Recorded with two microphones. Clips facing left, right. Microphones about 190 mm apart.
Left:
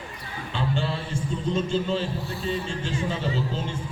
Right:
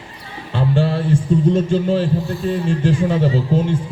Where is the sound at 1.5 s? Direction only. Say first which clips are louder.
Right 8 dB; 55° right (ahead or behind).